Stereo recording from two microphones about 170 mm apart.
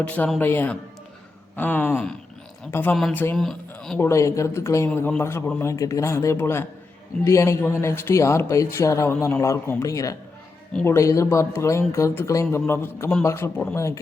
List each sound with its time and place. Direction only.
0.1 s speech: 10° left (ahead or behind)